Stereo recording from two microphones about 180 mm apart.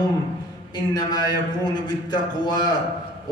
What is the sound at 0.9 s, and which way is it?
Speech, 20° left (ahead or behind).